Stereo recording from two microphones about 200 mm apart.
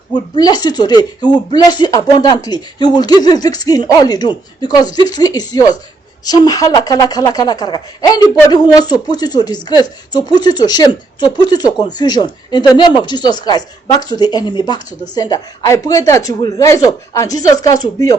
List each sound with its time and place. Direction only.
0.1 s speech: 20° left (ahead or behind)